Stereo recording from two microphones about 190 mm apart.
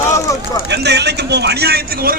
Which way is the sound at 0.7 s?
60° right (ahead or behind).